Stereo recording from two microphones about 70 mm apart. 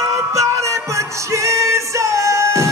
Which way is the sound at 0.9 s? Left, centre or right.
Right.